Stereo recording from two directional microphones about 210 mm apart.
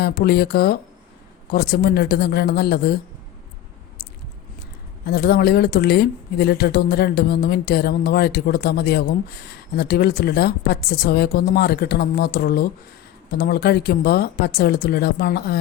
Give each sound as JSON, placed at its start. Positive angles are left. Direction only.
{"t": 0.0, "sound": "a woman's voice", "side_deg": 45}
{"t": 5.0, "sound": "a woman's voice", "side_deg": 50}